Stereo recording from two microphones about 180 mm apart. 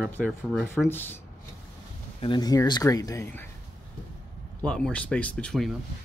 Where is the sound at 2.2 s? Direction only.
25° left (ahead or behind).